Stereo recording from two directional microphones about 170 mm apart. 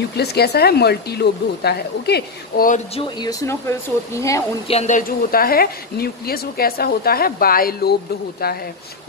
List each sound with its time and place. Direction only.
0.2 s speech: 75° left (ahead or behind)
3.0 s speech: 25° left (ahead or behind)
4.6 s a woman's voice: 40° left (ahead or behind); by 7.9 s 60° left (ahead or behind)